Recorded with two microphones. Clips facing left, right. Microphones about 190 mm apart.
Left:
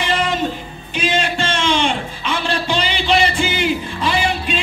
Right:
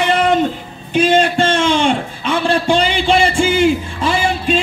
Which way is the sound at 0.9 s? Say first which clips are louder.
Right 8 dB; 50° right (ahead or behind).